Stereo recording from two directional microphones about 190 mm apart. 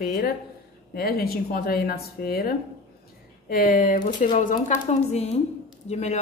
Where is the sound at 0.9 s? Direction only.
55° left (ahead or behind).